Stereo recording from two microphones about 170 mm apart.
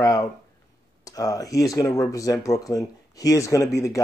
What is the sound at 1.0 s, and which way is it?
Speech, 20° left (ahead or behind).